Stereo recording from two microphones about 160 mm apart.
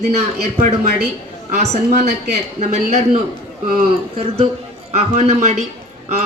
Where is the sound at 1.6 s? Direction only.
50° right (ahead or behind).